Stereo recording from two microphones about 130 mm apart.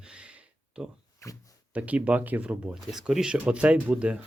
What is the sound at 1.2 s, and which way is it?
Speech, 25° left (ahead or behind).